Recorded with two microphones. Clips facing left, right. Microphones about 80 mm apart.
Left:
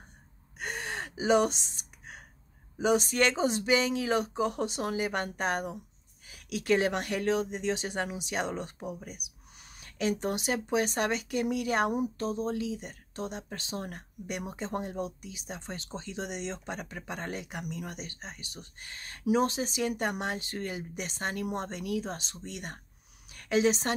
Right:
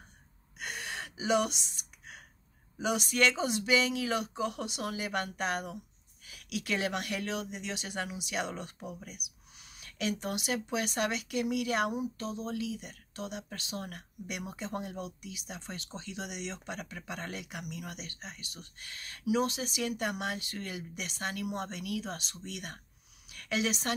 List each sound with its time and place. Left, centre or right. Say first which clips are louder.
0.6 s gasp: left 4 dB; left
2.8 s a woman's voice: left 3 dB; left